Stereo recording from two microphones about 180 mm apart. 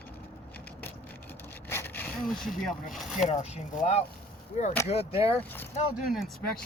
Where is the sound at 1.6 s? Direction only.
15° left (ahead or behind).